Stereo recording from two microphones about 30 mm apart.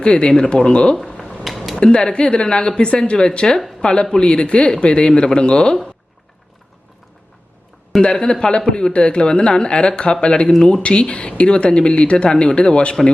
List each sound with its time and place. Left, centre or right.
0.0 s speech: left
1.5 s a sound: centre
1.8 s speech: left
8.0 s speech: left